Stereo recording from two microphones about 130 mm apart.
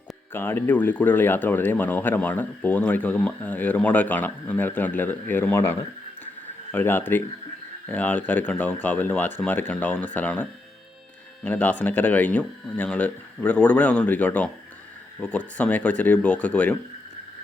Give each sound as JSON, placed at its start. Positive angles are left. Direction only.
{"t": 0.3, "sound": "speech", "side_deg": 15}